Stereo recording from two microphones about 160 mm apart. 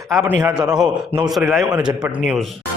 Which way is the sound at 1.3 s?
5° right (ahead or behind).